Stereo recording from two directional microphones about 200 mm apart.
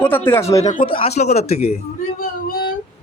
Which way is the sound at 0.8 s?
25° left (ahead or behind).